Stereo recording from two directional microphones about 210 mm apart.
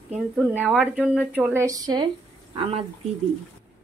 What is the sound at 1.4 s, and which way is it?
Speech, 15° right (ahead or behind).